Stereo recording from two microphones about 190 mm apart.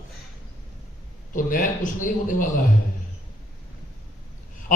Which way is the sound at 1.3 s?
45° left (ahead or behind).